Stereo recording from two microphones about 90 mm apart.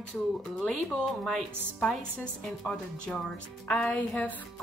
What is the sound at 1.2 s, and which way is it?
Music, 5° left (ahead or behind).